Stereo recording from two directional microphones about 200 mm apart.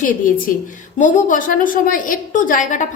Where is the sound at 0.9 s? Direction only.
40° left (ahead or behind).